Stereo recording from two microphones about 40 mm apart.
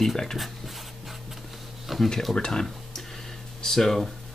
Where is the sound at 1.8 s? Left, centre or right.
Centre.